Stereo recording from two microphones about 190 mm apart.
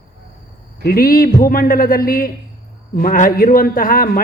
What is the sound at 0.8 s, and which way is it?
A man's voice, 50° left (ahead or behind).